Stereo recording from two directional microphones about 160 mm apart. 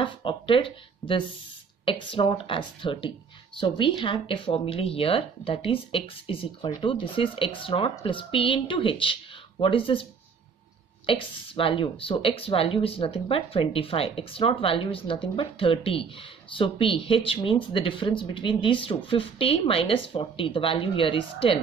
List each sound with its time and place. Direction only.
0.0 s speech: 30° left (ahead or behind)
11.1 s speech: 35° left (ahead or behind)